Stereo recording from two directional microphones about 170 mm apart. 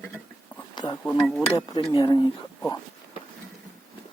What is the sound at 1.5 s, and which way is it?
Speech, 25° left (ahead or behind).